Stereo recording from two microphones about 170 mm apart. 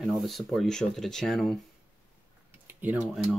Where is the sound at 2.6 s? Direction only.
10° right (ahead or behind).